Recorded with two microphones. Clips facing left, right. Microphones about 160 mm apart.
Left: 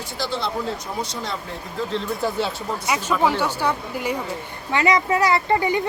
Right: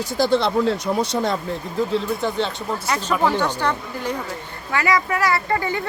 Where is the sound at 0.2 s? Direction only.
60° right (ahead or behind).